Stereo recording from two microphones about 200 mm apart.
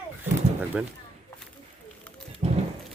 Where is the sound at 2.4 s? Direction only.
30° right (ahead or behind).